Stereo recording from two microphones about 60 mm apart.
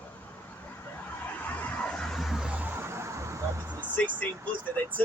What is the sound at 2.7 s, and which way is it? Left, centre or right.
Vehicle, right.